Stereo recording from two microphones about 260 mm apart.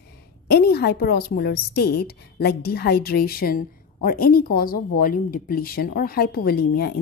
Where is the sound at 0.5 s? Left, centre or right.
Left.